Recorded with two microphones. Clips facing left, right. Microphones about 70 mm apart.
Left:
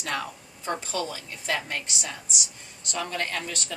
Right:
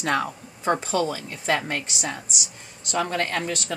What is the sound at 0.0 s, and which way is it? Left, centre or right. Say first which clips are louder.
A woman's voice: right 7 dB; right.